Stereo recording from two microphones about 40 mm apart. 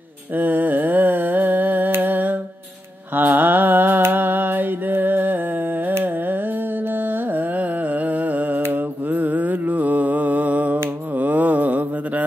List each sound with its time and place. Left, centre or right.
0.4 s mantra: right
2.0 s music: right
3.2 s mantra: right
9.1 s a sound: right